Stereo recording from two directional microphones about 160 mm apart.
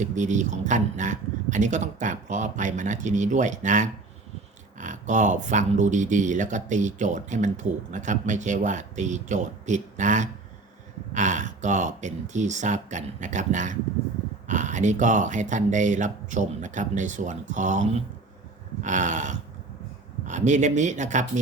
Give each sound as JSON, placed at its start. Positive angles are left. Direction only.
{"t": 0.0, "sound": "speech", "side_deg": -50}